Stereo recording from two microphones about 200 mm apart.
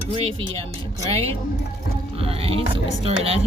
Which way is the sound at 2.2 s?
30° right (ahead or behind).